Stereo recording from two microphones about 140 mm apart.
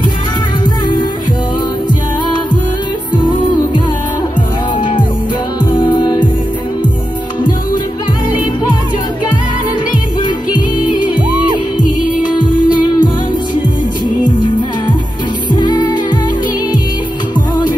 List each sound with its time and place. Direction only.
5.7 s music: 35° left (ahead or behind)
10.2 s music: 30° left (ahead or behind)
12.4 s music: 30° left (ahead or behind)
15.5 s music: 30° left (ahead or behind)